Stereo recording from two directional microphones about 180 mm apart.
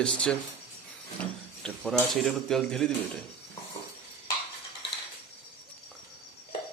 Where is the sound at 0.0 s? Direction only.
5° left (ahead or behind).